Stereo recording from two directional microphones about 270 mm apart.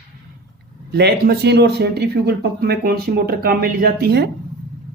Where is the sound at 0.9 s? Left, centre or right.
Right.